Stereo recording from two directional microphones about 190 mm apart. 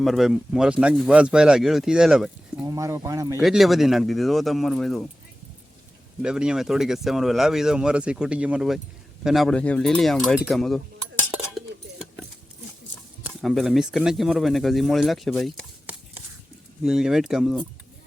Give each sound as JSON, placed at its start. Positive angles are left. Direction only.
{"t": 0.0, "sound": "speech", "side_deg": 0}
{"t": 2.6, "sound": "speech", "side_deg": -15}
{"t": 3.4, "sound": "speech", "side_deg": 0}
{"t": 6.2, "sound": "speech", "side_deg": -5}
{"t": 11.3, "sound": "chink", "side_deg": -5}
{"t": 13.2, "sound": "speech", "side_deg": 0}